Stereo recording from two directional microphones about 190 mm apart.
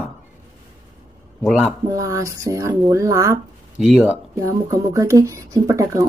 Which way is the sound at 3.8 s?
5° right (ahead or behind).